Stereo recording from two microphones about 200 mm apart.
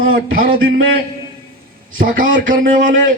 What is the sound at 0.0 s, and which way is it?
Speech, 90° right.